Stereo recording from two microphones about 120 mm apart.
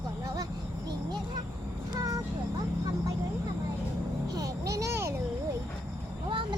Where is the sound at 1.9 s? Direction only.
30° right (ahead or behind).